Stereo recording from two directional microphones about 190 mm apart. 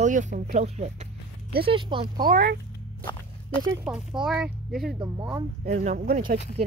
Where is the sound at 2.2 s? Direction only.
50° right (ahead or behind).